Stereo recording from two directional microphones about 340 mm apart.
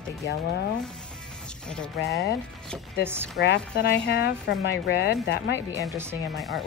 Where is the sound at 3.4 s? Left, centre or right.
Left.